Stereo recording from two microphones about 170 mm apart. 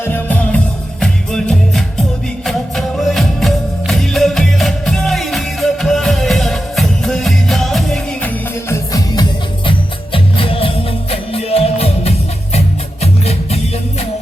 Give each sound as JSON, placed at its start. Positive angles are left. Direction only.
{"t": 0.0, "sound": "music", "side_deg": 10}
{"t": 8.7, "sound": "music", "side_deg": 20}
{"t": 9.6, "sound": "music", "side_deg": 30}